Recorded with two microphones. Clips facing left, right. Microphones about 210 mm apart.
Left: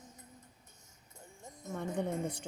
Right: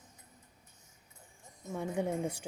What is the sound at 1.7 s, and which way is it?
Speech, 10° right (ahead or behind).